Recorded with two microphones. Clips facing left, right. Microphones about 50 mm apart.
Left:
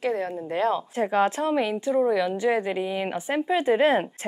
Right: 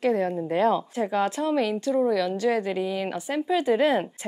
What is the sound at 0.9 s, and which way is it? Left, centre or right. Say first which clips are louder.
A woman's voice: left 2 dB; left.